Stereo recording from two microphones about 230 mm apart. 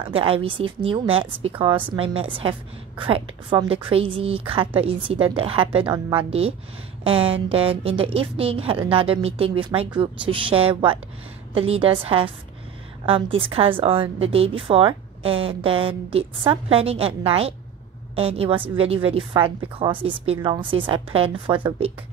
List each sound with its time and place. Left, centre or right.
0.1 s a woman's voice: right